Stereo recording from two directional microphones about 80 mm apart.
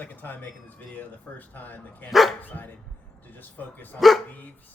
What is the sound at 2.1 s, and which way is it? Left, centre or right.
Speech, centre.